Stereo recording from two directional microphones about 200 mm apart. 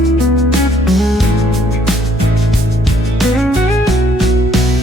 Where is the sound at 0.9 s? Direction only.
Centre (ahead or behind).